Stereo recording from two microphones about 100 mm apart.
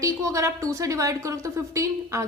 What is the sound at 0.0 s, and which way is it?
A woman's voice, 30° right (ahead or behind).